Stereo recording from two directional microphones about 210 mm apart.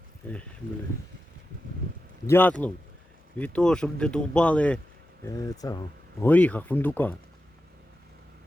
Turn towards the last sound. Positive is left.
turn(degrees=10)  # may be behind; listen again after turning